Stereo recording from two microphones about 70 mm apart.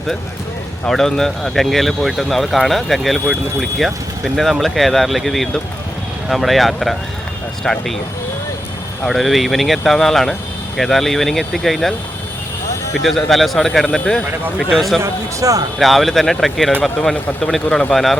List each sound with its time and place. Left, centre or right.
0.9 s speech: centre
9.0 s speech: centre
13.1 s speech: centre
15.0 s a man's voice: right
15.8 s a man's voice: centre